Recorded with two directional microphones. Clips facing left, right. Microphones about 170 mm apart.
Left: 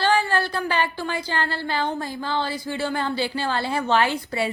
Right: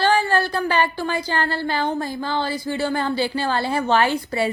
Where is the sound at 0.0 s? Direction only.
45° right (ahead or behind).